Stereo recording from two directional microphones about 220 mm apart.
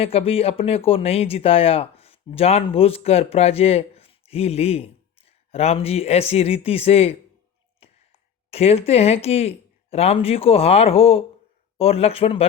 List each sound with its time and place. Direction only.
0.0 s speech: 25° left (ahead or behind)
8.4 s speech: 25° left (ahead or behind)